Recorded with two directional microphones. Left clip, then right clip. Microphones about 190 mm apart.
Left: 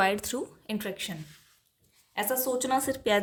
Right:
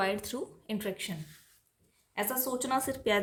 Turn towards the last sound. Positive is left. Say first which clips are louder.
# left 3 dB
turn(degrees=20)  # may be behind; listen again after turning